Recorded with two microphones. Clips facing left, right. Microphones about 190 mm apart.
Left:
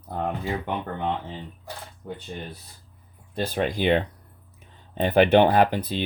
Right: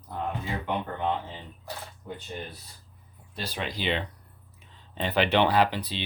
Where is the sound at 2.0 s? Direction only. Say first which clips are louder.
Left 4 dB; 55° left (ahead or behind).